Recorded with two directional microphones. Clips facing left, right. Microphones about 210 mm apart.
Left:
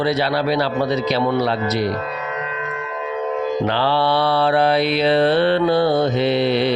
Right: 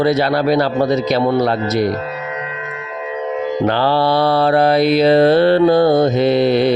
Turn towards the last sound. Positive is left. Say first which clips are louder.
# right 4 dB
turn(degrees=-45)  # may be behind; listen again after turning